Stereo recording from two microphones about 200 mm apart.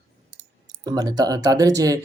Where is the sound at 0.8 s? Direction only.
20° right (ahead or behind).